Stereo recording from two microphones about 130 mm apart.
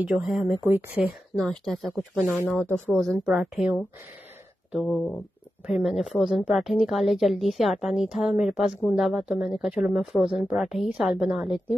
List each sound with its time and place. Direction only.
0.0 s speech: 5° right (ahead or behind)
0.7 s speech: 15° right (ahead or behind)
1.3 s a woman's voice: 5° left (ahead or behind)
2.4 s speech: 15° left (ahead or behind)
2.9 s a woman's voice: centre (ahead or behind)
4.7 s a woman's voice: 5° left (ahead or behind)